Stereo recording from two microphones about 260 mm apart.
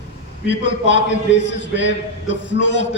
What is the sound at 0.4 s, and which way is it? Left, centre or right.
A man's voice, left.